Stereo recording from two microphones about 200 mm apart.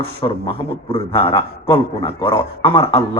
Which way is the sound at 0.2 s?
25° left (ahead or behind).